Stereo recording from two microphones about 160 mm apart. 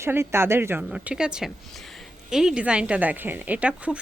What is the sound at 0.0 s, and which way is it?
A woman's voice, 15° right (ahead or behind).